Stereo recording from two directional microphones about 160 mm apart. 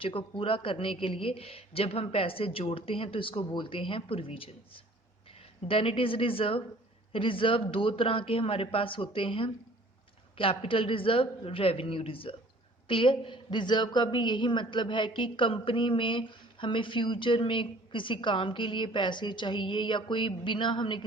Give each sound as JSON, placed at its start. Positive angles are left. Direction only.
{"t": 0.0, "sound": "a woman's voice", "side_deg": 35}